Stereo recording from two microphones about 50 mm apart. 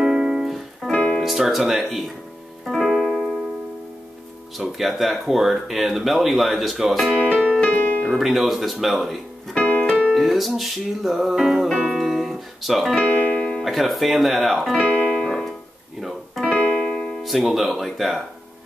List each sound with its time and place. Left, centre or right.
0.0 s music: centre
1.1 s speech: centre
2.6 s piano: centre
4.6 s speech: centre
7.7 s piano: left
8.0 s speech: centre
9.6 s piano: left
10.1 s music: centre
13.6 s speech: centre
14.8 s keyboard: centre
15.1 s keyboard: centre
16.0 s music: centre
16.8 s speech: centre